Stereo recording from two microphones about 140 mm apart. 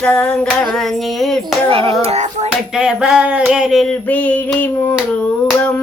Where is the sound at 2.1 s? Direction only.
50° right (ahead or behind).